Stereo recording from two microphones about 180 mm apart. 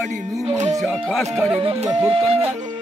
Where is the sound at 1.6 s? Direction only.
35° right (ahead or behind).